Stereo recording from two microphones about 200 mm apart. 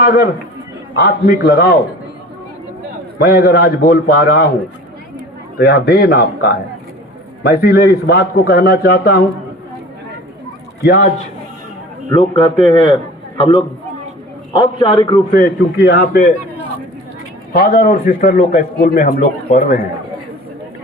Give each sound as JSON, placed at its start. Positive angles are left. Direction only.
{"t": 0.9, "sound": "a man's voice", "side_deg": 50}
{"t": 3.2, "sound": "a man's voice", "side_deg": 50}
{"t": 5.5, "sound": "a man's voice", "side_deg": 55}
{"t": 7.4, "sound": "a man's voice", "side_deg": 50}
{"t": 10.8, "sound": "a man's voice", "side_deg": 50}
{"t": 12.3, "sound": "a man's voice", "side_deg": 25}
{"t": 15.4, "sound": "a man's voice", "side_deg": 50}
{"t": 17.5, "sound": "a man's voice", "side_deg": 50}